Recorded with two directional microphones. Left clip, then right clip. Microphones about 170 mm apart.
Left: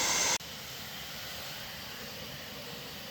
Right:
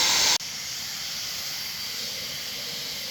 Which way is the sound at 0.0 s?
25° right (ahead or behind).